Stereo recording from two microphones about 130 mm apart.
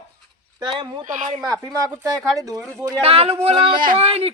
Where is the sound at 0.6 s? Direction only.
35° right (ahead or behind).